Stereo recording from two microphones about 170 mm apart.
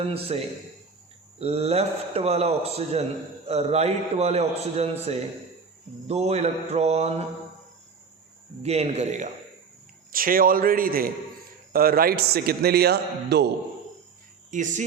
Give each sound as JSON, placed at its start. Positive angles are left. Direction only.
{"t": 0.0, "sound": "a man's voice", "side_deg": -35}
{"t": 8.6, "sound": "a man's voice", "side_deg": -40}
{"t": 10.1, "sound": "a man's voice", "side_deg": -55}
{"t": 14.5, "sound": "speech", "side_deg": -45}